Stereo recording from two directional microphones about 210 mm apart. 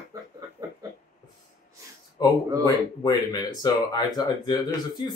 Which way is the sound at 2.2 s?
20° left (ahead or behind).